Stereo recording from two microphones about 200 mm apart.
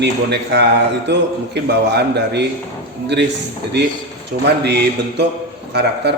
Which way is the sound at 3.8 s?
60° right (ahead or behind).